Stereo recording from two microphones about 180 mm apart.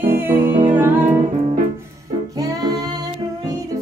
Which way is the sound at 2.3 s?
20° right (ahead or behind).